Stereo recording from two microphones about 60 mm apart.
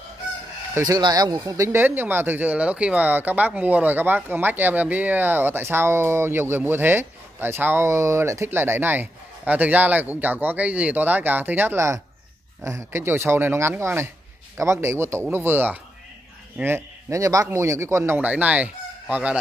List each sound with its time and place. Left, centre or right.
0.8 s speech: right
1.7 s speech: right
8.5 s speech: right
12.6 s speech: right
15.3 s speech: right
17.1 s speech: right
17.5 s speech: right
18.1 s speech: right